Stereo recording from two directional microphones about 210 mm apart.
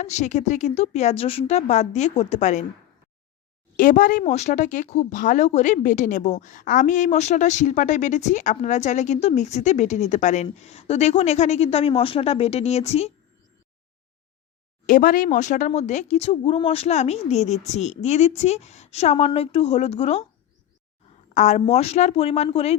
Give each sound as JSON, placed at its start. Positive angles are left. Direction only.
{"t": 0.0, "sound": "a woman's voice", "side_deg": 35}
{"t": 3.8, "sound": "a woman's voice", "side_deg": 40}
{"t": 14.8, "sound": "a woman's voice", "side_deg": 40}
{"t": 21.3, "sound": "a woman's voice", "side_deg": 35}